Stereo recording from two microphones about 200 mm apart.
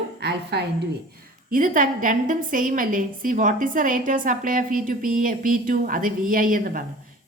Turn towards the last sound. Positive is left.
turn(degrees=-45)  # may be behind; listen again after turning